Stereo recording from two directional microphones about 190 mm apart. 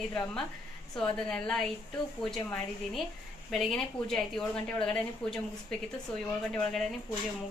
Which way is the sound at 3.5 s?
Centre (ahead or behind).